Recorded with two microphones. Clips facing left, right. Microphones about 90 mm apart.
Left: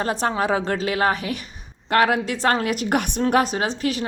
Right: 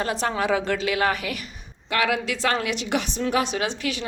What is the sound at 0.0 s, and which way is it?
A woman's voice, 35° left (ahead or behind).